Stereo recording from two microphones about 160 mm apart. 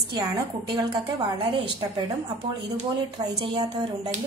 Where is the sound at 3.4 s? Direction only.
30° right (ahead or behind).